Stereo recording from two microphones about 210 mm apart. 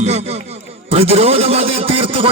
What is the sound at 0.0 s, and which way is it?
Music, 30° right (ahead or behind).